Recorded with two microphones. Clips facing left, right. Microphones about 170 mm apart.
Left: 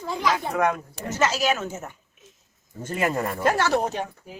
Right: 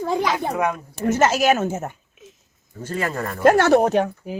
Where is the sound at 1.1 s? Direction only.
50° right (ahead or behind).